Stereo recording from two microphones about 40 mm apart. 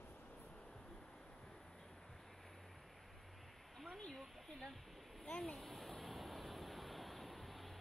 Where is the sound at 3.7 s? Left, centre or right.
Centre.